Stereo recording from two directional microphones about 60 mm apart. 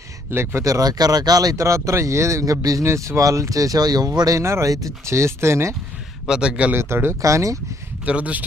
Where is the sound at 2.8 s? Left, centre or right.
Right.